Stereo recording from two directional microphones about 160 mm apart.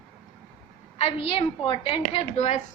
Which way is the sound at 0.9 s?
40° left (ahead or behind).